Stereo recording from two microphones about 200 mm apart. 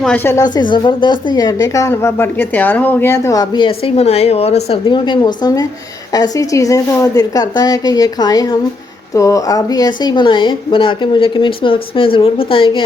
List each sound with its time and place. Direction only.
0.0 s a woman's voice: 10° left (ahead or behind); by 12.8 s 25° left (ahead or behind)